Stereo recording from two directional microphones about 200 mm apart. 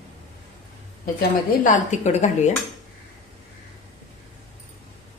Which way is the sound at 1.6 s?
40° left (ahead or behind).